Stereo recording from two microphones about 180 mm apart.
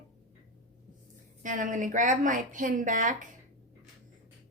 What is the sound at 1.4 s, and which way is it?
A woman's voice, 45° right (ahead or behind).